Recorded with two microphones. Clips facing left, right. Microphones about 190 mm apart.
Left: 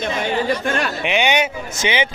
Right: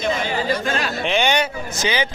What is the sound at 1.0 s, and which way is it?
Speech, 15° left (ahead or behind).